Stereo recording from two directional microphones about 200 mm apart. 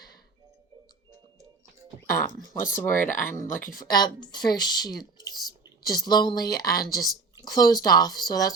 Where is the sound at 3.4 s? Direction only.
45° left (ahead or behind).